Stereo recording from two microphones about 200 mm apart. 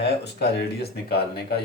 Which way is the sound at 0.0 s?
55° left (ahead or behind).